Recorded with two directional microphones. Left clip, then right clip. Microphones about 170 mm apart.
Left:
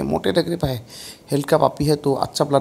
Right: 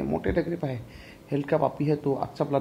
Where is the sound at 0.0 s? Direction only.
35° left (ahead or behind).